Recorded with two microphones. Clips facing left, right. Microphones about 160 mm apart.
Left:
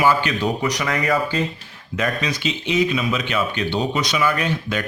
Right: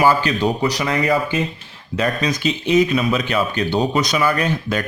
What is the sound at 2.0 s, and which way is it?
Speech, 40° right (ahead or behind).